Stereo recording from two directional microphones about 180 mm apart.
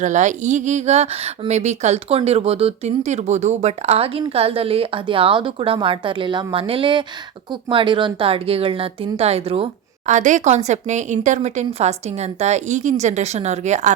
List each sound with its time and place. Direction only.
0.0 s speech: 45° right (ahead or behind)